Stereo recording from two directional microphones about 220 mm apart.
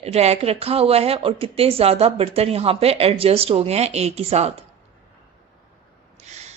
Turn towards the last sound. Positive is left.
turn(degrees=-30)  # may be behind; listen again after turning